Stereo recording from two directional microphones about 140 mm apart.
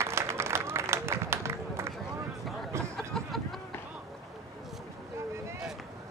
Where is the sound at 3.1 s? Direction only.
Centre (ahead or behind).